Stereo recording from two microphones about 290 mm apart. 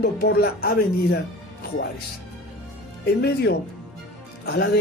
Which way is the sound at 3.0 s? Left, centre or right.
Left.